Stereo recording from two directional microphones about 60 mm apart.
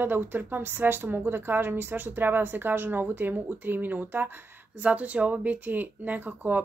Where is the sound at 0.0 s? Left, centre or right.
Right.